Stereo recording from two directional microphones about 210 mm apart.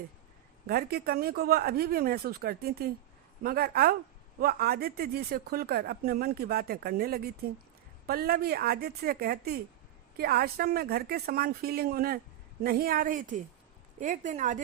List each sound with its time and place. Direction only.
0.7 s a woman's voice: 50° right (ahead or behind)